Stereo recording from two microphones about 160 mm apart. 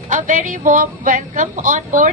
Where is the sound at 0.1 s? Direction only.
55° right (ahead or behind).